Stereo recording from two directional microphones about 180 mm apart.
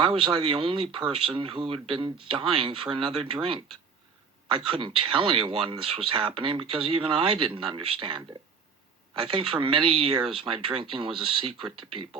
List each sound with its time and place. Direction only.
0.0 s speech: 30° right (ahead or behind)